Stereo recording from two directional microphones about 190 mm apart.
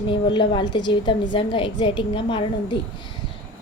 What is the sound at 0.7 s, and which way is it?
A woman's voice, 25° left (ahead or behind).